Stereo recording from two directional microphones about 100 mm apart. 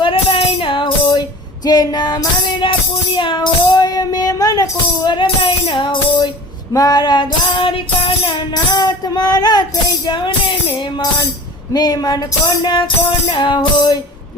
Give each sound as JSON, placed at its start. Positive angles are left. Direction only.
{"t": 0.0, "sound": "music", "side_deg": 65}
{"t": 1.6, "sound": "music", "side_deg": 40}
{"t": 5.2, "sound": "music", "side_deg": 75}
{"t": 6.7, "sound": "music", "side_deg": 40}
{"t": 8.5, "sound": "music", "side_deg": 45}
{"t": 10.1, "sound": "music", "side_deg": 55}
{"t": 11.7, "sound": "music", "side_deg": 40}